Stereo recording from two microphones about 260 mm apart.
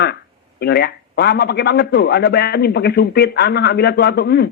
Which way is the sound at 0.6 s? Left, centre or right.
Left.